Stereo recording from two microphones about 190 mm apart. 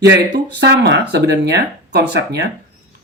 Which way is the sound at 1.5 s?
60° right (ahead or behind).